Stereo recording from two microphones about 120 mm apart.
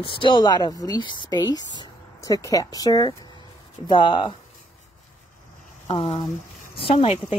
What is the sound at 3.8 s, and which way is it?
Speech, 45° left (ahead or behind).